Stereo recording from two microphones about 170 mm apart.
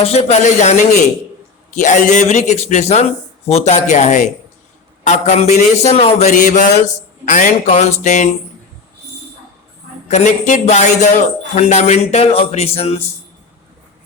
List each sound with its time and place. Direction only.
0.0 s a man's voice: 40° left (ahead or behind)
10.1 s a man's voice: 45° left (ahead or behind)